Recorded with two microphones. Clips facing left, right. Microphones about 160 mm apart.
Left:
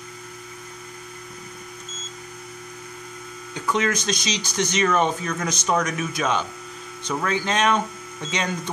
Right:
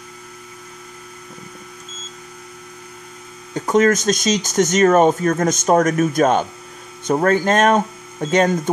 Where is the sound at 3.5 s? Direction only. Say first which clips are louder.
Right 9 dB; 45° right (ahead or behind).